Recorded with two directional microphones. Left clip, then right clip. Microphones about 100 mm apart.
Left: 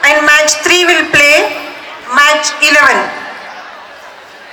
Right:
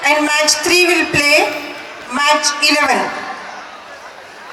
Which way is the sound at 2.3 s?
25° left (ahead or behind).